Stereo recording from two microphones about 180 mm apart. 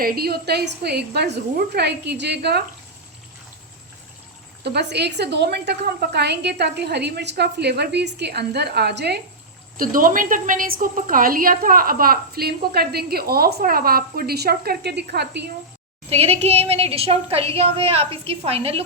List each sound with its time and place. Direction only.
0.0 s a woman's voice: 55° right (ahead or behind)
4.6 s a woman's voice: 70° right (ahead or behind)
9.7 s a woman's voice: 50° right (ahead or behind); by 15.4 s 70° right (ahead or behind)
16.0 s a woman's voice: 35° right (ahead or behind)